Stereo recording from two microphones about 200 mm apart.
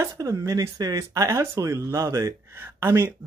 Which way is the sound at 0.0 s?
15° right (ahead or behind).